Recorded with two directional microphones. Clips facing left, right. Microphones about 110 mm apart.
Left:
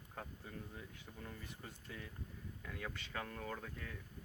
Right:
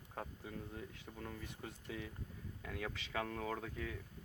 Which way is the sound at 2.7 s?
90° right.